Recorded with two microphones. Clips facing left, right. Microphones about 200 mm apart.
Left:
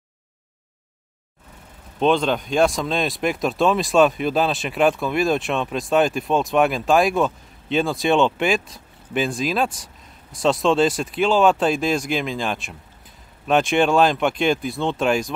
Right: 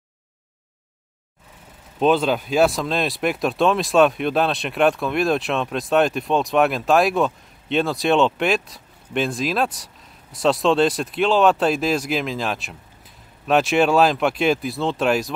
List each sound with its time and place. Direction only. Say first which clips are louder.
2.0 s speech: right 1 dB; 5° right (ahead or behind)